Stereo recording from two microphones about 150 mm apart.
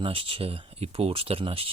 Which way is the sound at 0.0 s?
35° right (ahead or behind).